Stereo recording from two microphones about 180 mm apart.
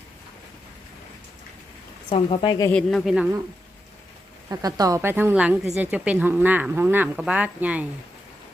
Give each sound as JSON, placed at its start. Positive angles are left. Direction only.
{"t": 2.0, "sound": "speech", "side_deg": 30}
{"t": 2.7, "sound": "a man's voice", "side_deg": 0}
{"t": 4.4, "sound": "a woman's voice", "side_deg": -20}